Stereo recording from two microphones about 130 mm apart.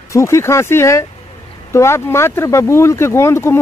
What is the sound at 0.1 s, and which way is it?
Speech, 20° left (ahead or behind).